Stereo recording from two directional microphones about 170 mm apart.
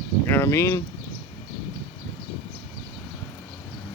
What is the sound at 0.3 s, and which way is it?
Speech, 15° left (ahead or behind).